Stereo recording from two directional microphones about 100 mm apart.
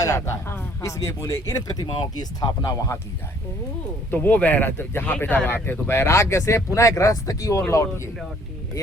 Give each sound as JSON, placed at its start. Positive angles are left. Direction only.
{"t": 0.0, "sound": "speech", "side_deg": 30}
{"t": 1.8, "sound": "speech", "side_deg": 50}
{"t": 2.6, "sound": "speech", "side_deg": 30}
{"t": 4.1, "sound": "speech", "side_deg": 15}